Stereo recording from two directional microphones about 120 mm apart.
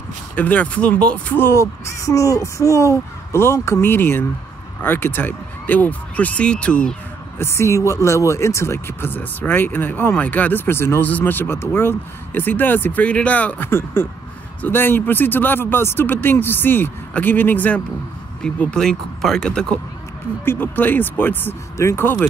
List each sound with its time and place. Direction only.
0.4 s speech: 10° left (ahead or behind)
7.3 s speech: 20° left (ahead or behind)